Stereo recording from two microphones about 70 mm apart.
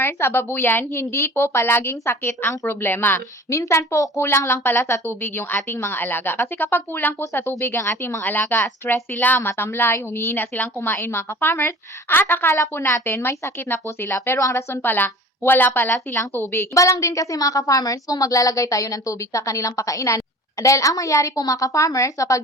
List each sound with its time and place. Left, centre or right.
0.0 s a woman's voice: left
3.5 s a woman's voice: left
16.7 s a woman's voice: left